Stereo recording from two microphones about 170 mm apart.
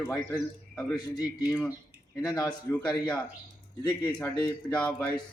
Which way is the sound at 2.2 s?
20° left (ahead or behind).